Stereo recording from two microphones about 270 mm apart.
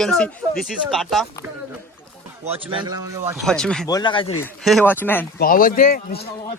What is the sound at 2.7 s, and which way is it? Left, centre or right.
Speech, centre.